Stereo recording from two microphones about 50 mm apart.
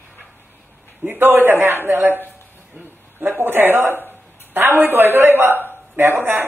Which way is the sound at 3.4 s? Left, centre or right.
Right.